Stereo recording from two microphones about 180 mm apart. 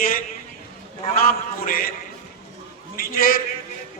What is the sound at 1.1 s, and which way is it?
Speech, 55° left (ahead or behind).